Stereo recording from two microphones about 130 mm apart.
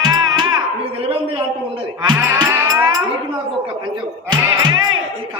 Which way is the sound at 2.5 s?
15° right (ahead or behind).